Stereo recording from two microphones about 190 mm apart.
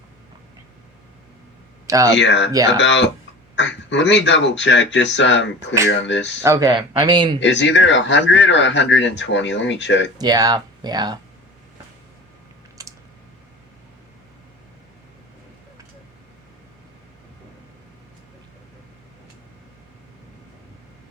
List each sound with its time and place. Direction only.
2.0 s speech: 70° left (ahead or behind)
6.4 s speech: 15° right (ahead or behind)
7.3 s speech: 70° left (ahead or behind)
10.2 s speech: 20° right (ahead or behind)
12.8 s typing: 20° right (ahead or behind)